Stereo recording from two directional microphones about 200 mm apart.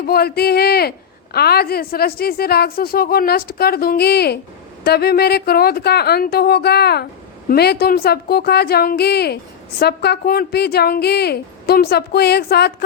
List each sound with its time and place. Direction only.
0.0 s a woman's voice: 50° left (ahead or behind)